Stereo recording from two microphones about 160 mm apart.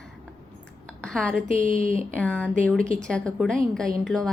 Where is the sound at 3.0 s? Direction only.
5° left (ahead or behind).